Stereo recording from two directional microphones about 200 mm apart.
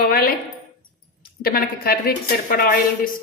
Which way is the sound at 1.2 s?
50° left (ahead or behind).